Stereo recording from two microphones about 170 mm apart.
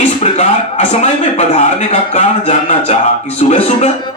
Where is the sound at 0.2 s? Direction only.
40° left (ahead or behind).